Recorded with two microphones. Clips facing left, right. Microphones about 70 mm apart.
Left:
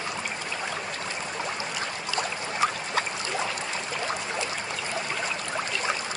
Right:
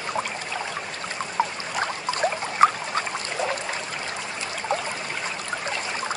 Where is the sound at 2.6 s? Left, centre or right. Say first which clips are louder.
Right 9 dB; right.